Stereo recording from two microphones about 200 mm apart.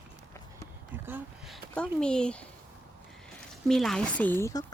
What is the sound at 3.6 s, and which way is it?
Speech, centre (ahead or behind).